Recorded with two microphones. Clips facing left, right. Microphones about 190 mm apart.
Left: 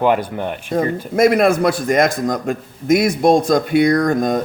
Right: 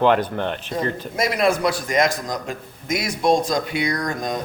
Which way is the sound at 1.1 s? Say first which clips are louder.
Left 8 dB; 55° left (ahead or behind).